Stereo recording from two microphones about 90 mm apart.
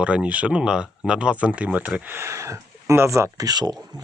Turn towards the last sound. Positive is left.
turn(degrees=-50)  # may be behind; listen again after turning